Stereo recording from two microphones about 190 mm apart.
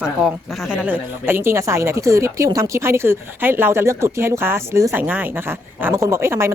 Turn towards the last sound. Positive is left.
turn(degrees=-15)  # may be behind; listen again after turning